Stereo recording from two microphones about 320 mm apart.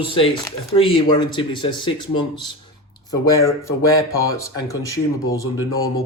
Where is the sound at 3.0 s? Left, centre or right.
Centre.